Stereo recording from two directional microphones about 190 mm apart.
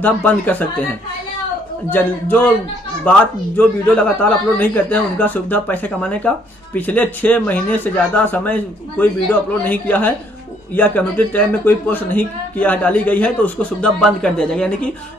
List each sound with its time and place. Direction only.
0.0 s a man's voice: 10° left (ahead or behind)
1.9 s a man's voice: 10° left (ahead or behind)